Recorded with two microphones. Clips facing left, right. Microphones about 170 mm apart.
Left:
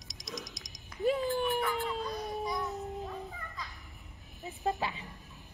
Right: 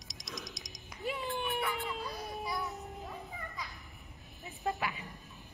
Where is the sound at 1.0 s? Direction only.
40° left (ahead or behind).